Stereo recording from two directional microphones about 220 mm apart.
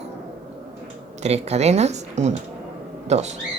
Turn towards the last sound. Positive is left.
turn(degrees=-30)  # may be behind; listen again after turning